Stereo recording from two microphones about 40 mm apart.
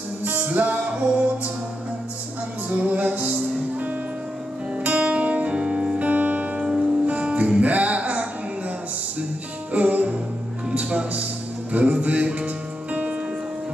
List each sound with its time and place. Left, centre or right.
0.2 s music: right
2.7 s music: right
4.8 s music: right
5.9 s music: right
6.6 s music: centre
7.1 s music: right
9.7 s music: right